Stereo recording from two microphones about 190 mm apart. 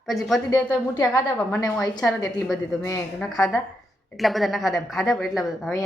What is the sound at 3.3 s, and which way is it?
A woman's voice, centre (ahead or behind).